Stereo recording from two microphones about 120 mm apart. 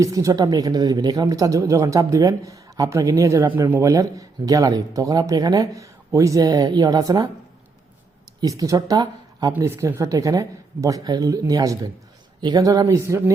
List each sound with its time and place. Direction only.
0.0 s speech: 30° right (ahead or behind)
8.4 s speech: 30° right (ahead or behind)